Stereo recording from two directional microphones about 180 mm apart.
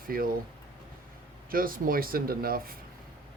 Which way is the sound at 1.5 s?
50° right (ahead or behind).